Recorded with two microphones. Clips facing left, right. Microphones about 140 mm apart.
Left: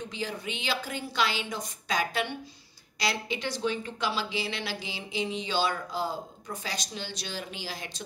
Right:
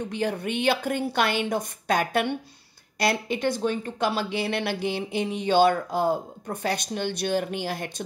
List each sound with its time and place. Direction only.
0.0 s speech: 55° right (ahead or behind)